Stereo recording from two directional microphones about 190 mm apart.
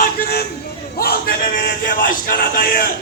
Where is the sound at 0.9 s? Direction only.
55° left (ahead or behind).